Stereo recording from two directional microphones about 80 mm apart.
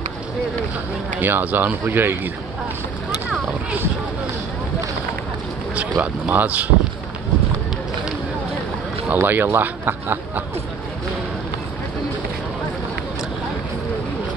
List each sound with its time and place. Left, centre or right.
1.2 s speech: right
5.8 s speech: centre
9.1 s speech: right